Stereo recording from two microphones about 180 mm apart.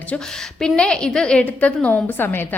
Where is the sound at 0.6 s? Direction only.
5° left (ahead or behind).